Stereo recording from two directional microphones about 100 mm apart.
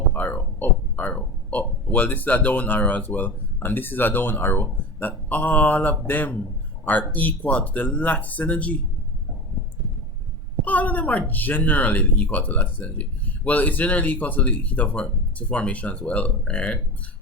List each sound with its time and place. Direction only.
0.1 s speech: 20° left (ahead or behind)
10.7 s speech: 15° left (ahead or behind)